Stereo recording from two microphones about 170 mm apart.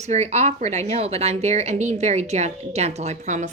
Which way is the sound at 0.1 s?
40° right (ahead or behind).